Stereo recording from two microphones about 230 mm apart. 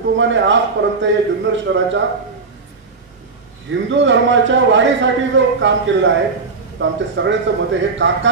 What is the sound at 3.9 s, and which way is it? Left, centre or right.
A man's voice, right.